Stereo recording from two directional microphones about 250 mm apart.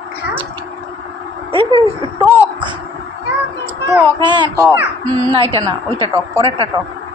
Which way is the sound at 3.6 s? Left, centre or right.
Centre.